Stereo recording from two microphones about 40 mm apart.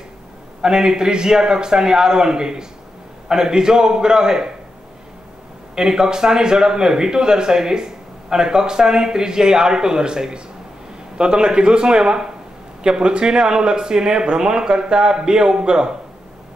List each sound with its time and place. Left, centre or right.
0.6 s speech: centre
5.8 s speech: centre